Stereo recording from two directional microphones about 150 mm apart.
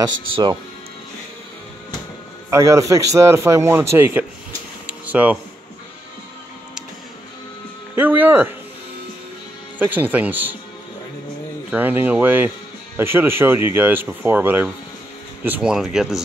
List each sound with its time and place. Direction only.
0.0 s a man's voice: 25° right (ahead or behind)
2.5 s a man's voice: 20° right (ahead or behind)
4.8 s a sound: 10° right (ahead or behind)
7.9 s speech: 10° right (ahead or behind)
9.8 s speech: 10° right (ahead or behind)
11.7 s speech: 15° right (ahead or behind)